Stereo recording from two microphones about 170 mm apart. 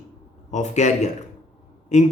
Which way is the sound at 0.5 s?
45° left (ahead or behind).